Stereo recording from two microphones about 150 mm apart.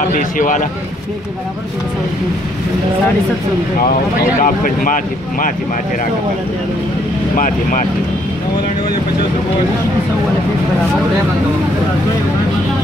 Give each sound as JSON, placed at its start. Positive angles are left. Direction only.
{"t": 0.1, "sound": "speech", "side_deg": 60}
{"t": 4.4, "sound": "speech", "side_deg": 65}
{"t": 7.3, "sound": "speech", "side_deg": 60}